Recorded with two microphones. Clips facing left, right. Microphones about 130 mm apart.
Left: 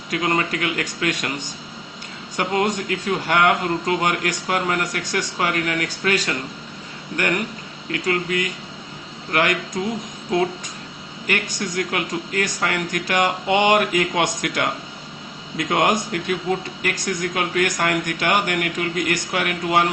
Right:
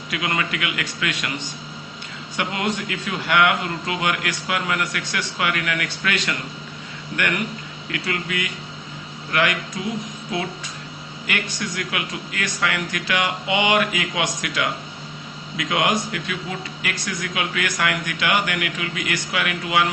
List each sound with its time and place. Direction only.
0.1 s a man's voice: 40° left (ahead or behind)
2.3 s a man's voice: 40° left (ahead or behind)
11.3 s a man's voice: 45° left (ahead or behind)